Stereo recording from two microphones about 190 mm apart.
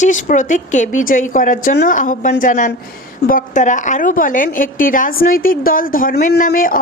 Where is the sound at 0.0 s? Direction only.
40° left (ahead or behind).